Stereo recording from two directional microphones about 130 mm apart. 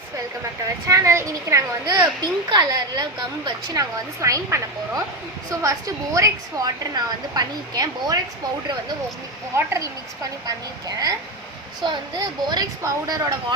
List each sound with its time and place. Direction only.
0.9 s a woman's voice: 25° right (ahead or behind)
9.6 s a woman's voice: 20° right (ahead or behind)